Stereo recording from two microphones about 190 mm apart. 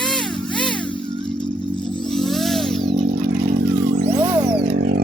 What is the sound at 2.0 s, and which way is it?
Chainsaw, centre (ahead or behind).